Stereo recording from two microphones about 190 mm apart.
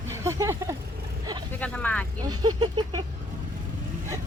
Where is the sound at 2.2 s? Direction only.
25° right (ahead or behind).